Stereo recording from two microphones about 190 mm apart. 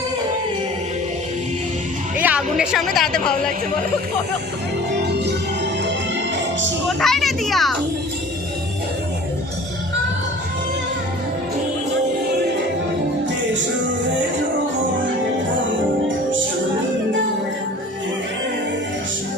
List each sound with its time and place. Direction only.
2.2 s a woman's voice: 5° right (ahead or behind)
4.9 s music: 60° right (ahead or behind)
6.8 s a child's voice: centre (ahead or behind)